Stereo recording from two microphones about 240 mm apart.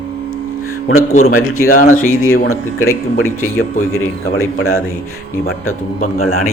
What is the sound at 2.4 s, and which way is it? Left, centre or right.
Speech, left.